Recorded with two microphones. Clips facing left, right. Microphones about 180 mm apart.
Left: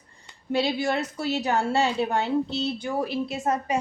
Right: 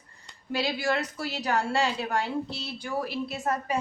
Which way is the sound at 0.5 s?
25° left (ahead or behind).